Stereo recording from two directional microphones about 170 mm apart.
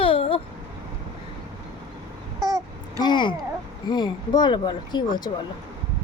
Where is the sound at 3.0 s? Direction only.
25° left (ahead or behind).